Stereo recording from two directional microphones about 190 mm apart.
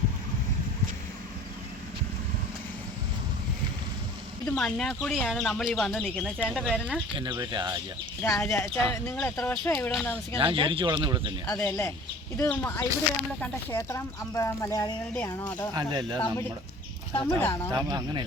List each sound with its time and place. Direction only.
4.4 s speech: centre (ahead or behind)
7.2 s speech: 25° right (ahead or behind)
8.2 s speech: 5° left (ahead or behind)
10.3 s speech: 30° right (ahead or behind)
11.4 s speech: 10° left (ahead or behind)
15.7 s speech: 20° right (ahead or behind)
16.1 s speech: 10° left (ahead or behind)
17.7 s speech: 20° right (ahead or behind)